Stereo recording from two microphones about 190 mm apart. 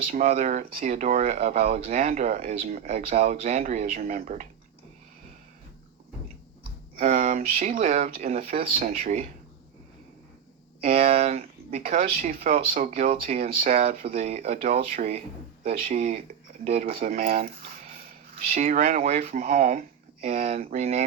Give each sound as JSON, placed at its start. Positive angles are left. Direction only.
{"t": 0.0, "sound": "speech", "side_deg": -45}
{"t": 1.5, "sound": "speech", "side_deg": -45}
{"t": 7.0, "sound": "speech", "side_deg": -45}
{"t": 10.8, "sound": "speech", "side_deg": -50}
{"t": 14.0, "sound": "speech", "side_deg": -35}